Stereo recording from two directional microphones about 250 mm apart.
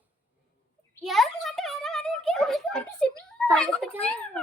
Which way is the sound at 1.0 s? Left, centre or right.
Centre.